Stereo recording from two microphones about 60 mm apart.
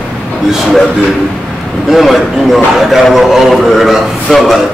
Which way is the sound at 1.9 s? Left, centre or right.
Centre.